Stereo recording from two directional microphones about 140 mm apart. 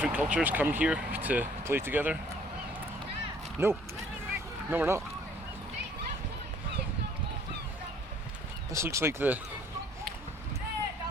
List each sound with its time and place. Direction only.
0.0 s speech: 10° right (ahead or behind)
3.6 s speech: 15° right (ahead or behind)
8.7 s speech: 20° right (ahead or behind)